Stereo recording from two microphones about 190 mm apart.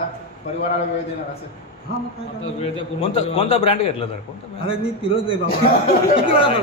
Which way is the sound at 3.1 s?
30° left (ahead or behind).